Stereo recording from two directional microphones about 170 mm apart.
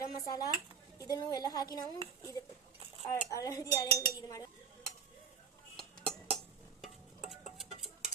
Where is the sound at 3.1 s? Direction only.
20° left (ahead or behind).